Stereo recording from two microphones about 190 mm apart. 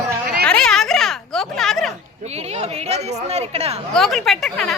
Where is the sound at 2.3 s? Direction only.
35° right (ahead or behind).